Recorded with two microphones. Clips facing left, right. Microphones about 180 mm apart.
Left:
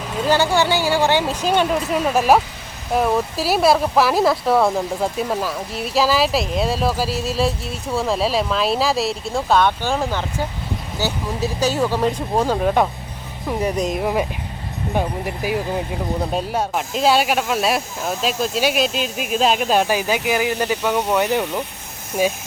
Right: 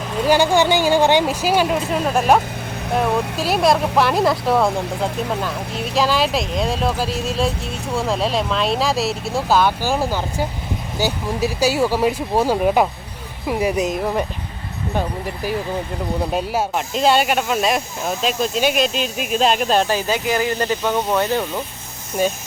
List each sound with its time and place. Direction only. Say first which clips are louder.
0.3 s speech: right 2 dB; 15° right (ahead or behind)
14.0 s speech: left 1 dB; 5° left (ahead or behind)
16.3 s speech: right 1 dB; 5° right (ahead or behind); by 21.6 s 15° left (ahead or behind)